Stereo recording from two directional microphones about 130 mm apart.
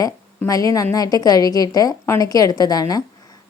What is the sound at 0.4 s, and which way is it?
A woman's voice, 25° left (ahead or behind).